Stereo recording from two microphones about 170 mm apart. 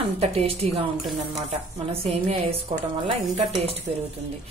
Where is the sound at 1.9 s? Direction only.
35° right (ahead or behind).